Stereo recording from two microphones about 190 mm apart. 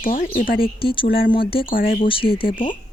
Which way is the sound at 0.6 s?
25° left (ahead or behind).